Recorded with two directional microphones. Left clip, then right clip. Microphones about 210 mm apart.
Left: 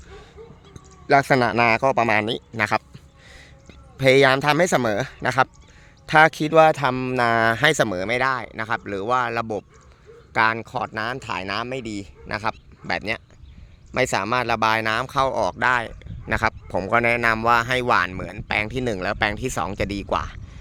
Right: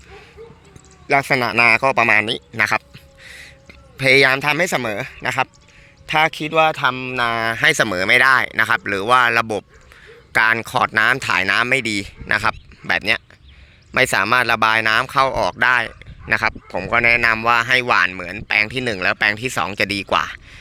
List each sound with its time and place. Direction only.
1.0 s a man's voice: 20° left (ahead or behind)
7.6 s speech: 10° left (ahead or behind)